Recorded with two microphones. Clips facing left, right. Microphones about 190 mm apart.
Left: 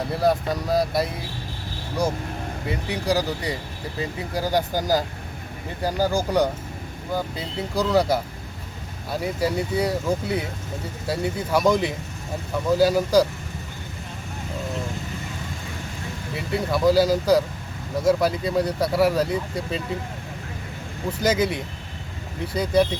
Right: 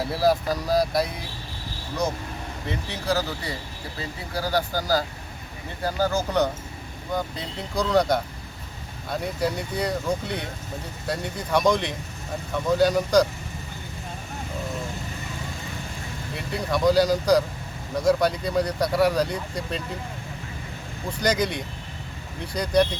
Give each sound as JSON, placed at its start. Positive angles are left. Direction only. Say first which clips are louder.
{"t": 0.0, "sound": "speech", "louder": "even", "side_deg": -5}
{"t": 2.6, "sound": "speech", "louder": "left 3 dB", "side_deg": 15}
{"t": 16.3, "sound": "speech", "louder": "left 2 dB", "side_deg": 5}
{"t": 21.1, "sound": "speech", "louder": "left 2 dB", "side_deg": 5}